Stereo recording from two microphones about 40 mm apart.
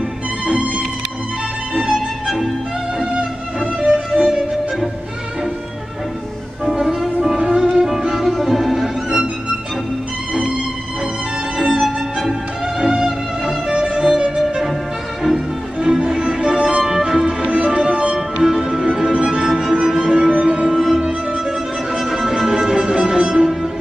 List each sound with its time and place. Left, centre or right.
0.5 s music: right
1.8 s music: centre
4.1 s music: centre
6.6 s music: centre
11.5 s music: centre
15.8 s music: centre
17.4 s music: right
18.4 s music: centre
20.2 s music: right
21.0 s music: right
21.9 s music: centre